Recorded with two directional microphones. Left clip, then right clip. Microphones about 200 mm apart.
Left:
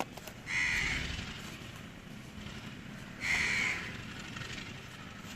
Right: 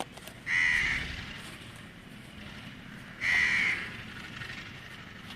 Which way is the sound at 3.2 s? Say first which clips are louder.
Right 5 dB; 50° left (ahead or behind).